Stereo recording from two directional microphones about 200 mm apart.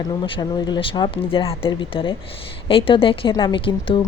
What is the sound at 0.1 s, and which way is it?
A woman's voice, 20° left (ahead or behind).